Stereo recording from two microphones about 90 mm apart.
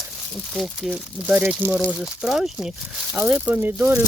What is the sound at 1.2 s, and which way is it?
Speech, 20° right (ahead or behind).